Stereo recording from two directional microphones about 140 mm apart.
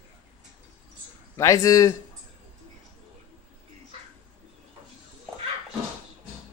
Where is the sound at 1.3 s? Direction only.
25° left (ahead or behind).